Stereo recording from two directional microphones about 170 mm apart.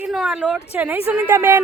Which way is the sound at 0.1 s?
5° right (ahead or behind).